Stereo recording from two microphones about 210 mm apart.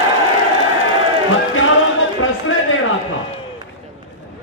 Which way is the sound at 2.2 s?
70° left (ahead or behind).